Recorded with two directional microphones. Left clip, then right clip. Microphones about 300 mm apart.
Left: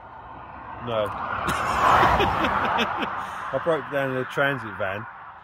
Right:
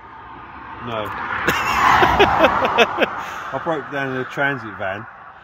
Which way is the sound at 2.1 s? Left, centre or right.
Centre.